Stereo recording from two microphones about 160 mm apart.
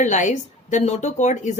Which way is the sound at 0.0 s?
50° left (ahead or behind).